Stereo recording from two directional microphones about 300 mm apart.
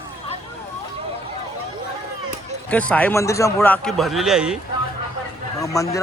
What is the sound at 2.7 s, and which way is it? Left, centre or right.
A man's voice, centre.